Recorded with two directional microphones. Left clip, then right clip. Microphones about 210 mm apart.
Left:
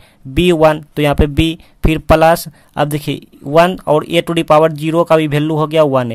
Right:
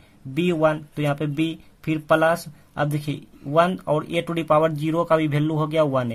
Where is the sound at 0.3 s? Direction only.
35° left (ahead or behind).